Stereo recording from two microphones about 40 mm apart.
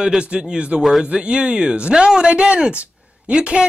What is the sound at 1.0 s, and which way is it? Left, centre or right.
Speech, right.